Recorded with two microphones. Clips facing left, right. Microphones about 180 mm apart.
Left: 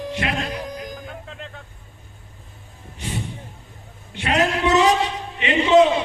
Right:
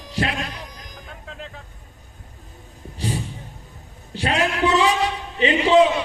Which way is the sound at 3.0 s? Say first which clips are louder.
Right 2 dB; 35° right (ahead or behind).